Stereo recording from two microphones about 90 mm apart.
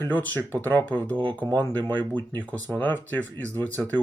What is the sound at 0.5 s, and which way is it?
Speech, 20° left (ahead or behind).